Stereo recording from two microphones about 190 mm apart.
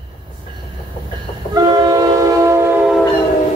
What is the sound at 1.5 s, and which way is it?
Train, 20° right (ahead or behind).